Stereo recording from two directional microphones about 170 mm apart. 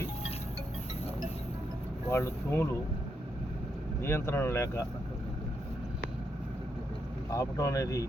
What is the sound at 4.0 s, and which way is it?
Speech, 15° left (ahead or behind).